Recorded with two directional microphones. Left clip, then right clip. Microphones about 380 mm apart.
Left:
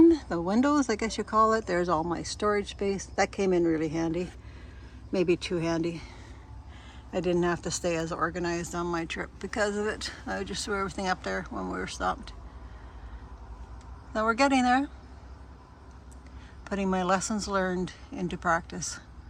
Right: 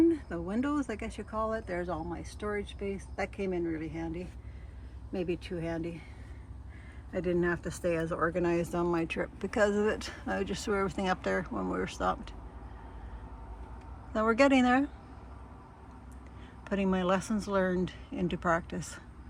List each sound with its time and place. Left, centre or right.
0.1 s speech: centre
7.1 s speech: centre
14.1 s speech: centre
16.6 s speech: centre